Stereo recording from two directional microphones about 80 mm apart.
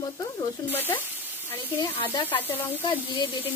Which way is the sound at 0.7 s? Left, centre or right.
Left.